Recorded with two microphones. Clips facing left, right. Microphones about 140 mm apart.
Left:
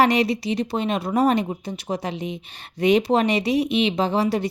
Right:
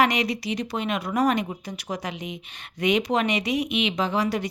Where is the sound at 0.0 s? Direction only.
30° left (ahead or behind).